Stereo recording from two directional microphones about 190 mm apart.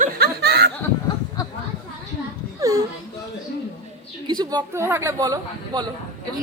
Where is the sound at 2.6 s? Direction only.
15° right (ahead or behind).